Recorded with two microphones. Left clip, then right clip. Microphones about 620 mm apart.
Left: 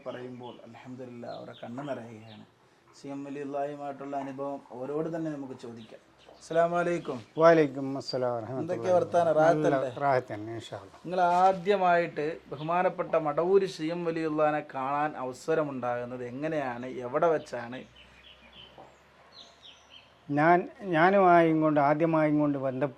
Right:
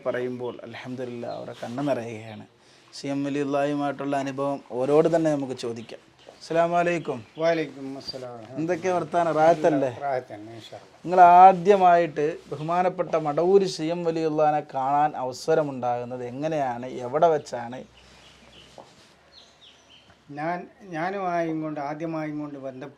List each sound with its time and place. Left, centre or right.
1.2 s speech: right
3.0 s speech: right
6.5 s speech: right
7.3 s speech: left
8.6 s speech: right
10.0 s speech: left
11.1 s speech: right
20.3 s speech: left